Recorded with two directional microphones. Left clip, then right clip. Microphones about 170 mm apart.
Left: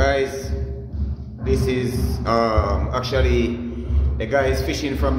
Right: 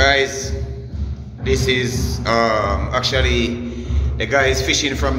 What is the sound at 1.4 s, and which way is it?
A man's voice, 5° left (ahead or behind).